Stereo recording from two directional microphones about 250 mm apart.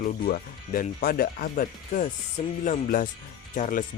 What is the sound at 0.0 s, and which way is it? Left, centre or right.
Speech, left.